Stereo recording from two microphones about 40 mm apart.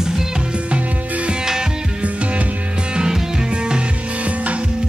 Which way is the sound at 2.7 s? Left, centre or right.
Right.